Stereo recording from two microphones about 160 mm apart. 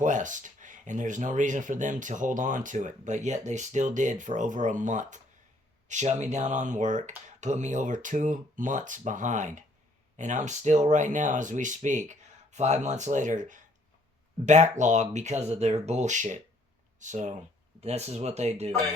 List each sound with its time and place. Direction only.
0.0 s speech: 50° right (ahead or behind)